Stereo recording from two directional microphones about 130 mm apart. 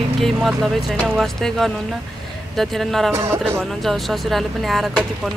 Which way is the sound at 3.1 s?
20° right (ahead or behind).